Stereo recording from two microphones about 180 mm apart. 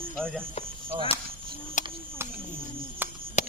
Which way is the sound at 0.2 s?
5° left (ahead or behind).